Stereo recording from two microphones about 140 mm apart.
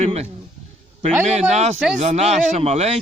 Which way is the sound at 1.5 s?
50° right (ahead or behind).